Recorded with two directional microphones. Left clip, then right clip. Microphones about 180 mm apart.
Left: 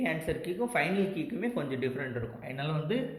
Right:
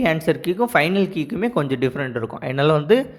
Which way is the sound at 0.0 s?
35° right (ahead or behind).